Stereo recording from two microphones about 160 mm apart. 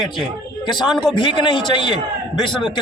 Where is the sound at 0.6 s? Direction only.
30° left (ahead or behind).